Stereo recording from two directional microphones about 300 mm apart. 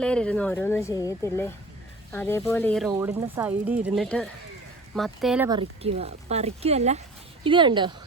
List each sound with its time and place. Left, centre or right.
0.0 s speech: centre
2.9 s speech: centre
5.5 s speech: centre